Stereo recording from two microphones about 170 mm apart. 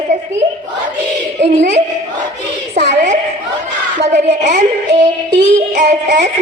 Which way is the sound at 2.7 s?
45° right (ahead or behind).